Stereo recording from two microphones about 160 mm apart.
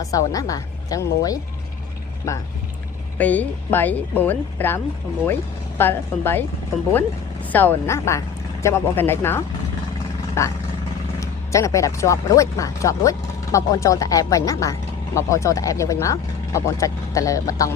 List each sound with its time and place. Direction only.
0.0 s speech: 20° left (ahead or behind)
7.5 s speech: 10° left (ahead or behind)